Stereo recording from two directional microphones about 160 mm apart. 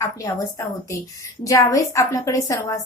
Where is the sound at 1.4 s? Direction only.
20° left (ahead or behind).